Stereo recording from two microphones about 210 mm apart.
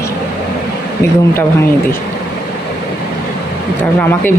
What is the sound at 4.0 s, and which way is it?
Speech, 10° left (ahead or behind).